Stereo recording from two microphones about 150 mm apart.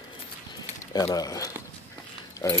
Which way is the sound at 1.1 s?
25° left (ahead or behind).